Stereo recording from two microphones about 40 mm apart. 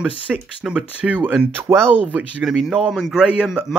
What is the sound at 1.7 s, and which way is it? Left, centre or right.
Speech, right.